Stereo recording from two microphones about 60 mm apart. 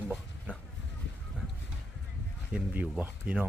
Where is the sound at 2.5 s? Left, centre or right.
Right.